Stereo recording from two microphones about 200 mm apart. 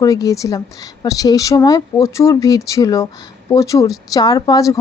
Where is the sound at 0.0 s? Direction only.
15° left (ahead or behind).